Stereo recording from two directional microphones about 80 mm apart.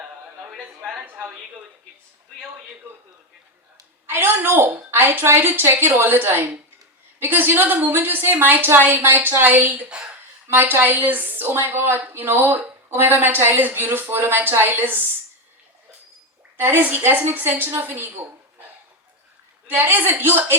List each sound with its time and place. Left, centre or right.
0.9 s a woman's voice: right
4.0 s a woman's voice: right
16.6 s a woman's voice: right
19.6 s a woman's voice: right